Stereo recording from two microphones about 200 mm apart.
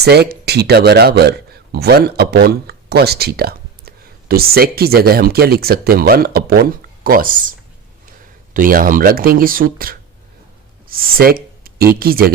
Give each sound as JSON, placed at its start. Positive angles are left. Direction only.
{"t": 0.0, "sound": "speech", "side_deg": -55}
{"t": 8.5, "sound": "speech", "side_deg": -45}